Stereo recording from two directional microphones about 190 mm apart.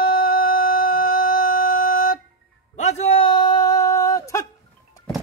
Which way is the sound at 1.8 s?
50° left (ahead or behind).